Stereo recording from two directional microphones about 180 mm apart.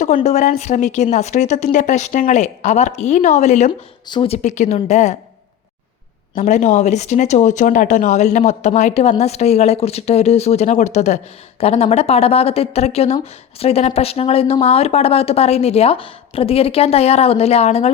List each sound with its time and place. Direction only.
0.0 s speech: 45° left (ahead or behind)
6.3 s speech: 40° left (ahead or behind)